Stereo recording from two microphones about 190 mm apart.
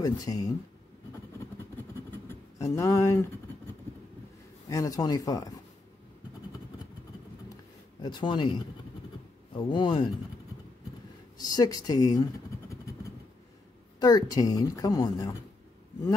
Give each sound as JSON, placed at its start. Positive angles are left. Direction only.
{"t": 0.0, "sound": "speech", "side_deg": 20}
{"t": 2.0, "sound": "a sound", "side_deg": 15}
{"t": 4.6, "sound": "speech", "side_deg": 15}
{"t": 8.0, "sound": "speech", "side_deg": 25}
{"t": 11.3, "sound": "speech", "side_deg": 20}
{"t": 13.9, "sound": "speech", "side_deg": 20}